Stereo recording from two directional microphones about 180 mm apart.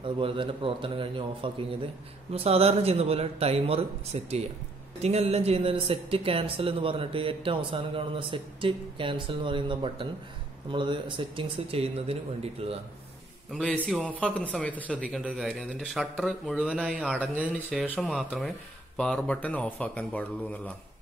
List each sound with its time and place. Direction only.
0.0 s speech: 30° right (ahead or behind)
13.5 s speech: 5° left (ahead or behind)